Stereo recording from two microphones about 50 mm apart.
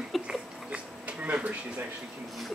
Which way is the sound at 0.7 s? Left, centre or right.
Right.